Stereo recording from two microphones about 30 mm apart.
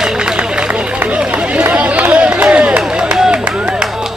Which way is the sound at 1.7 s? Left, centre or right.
Right.